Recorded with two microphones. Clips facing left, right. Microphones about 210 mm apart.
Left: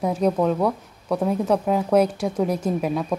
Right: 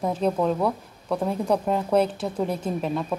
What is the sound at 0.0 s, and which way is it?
A woman's voice, 10° left (ahead or behind).